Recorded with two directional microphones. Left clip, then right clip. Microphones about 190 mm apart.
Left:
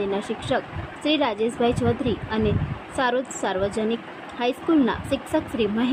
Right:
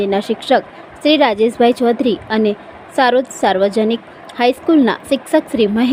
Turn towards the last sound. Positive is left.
turn(degrees=-35)  # may be behind; listen again after turning